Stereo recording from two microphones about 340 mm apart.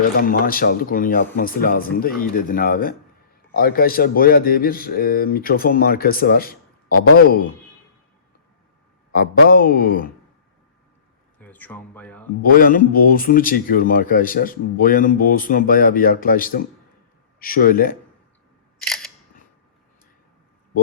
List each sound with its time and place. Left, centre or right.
0.2 s speech: left
9.1 s speech: left
11.3 s a sound: centre
12.4 s speech: left
18.9 s single-lens reflex camera: centre